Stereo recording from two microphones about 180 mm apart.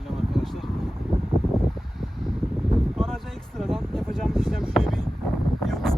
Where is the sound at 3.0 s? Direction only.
Centre (ahead or behind).